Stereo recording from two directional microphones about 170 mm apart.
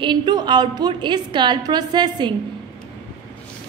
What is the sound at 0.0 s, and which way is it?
A woman's voice, 25° right (ahead or behind).